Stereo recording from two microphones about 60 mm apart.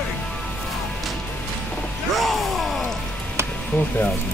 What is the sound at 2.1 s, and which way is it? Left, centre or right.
Music, centre.